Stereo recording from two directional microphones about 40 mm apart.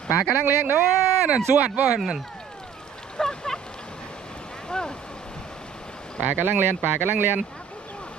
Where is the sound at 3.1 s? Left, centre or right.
Centre.